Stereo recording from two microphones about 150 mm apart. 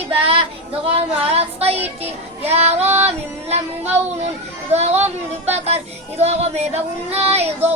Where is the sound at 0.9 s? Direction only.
40° right (ahead or behind).